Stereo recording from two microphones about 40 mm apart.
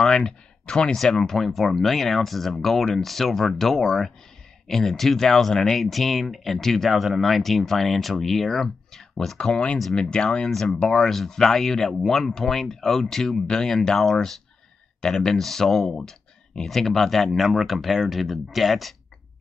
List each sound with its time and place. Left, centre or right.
0.0 s speech: centre
0.9 s speech: centre
9.4 s speech: left
10.5 s speech: centre